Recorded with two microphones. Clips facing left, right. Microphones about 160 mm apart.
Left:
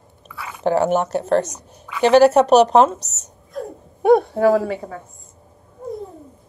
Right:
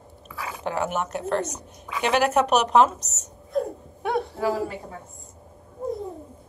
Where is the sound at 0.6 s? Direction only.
35° left (ahead or behind).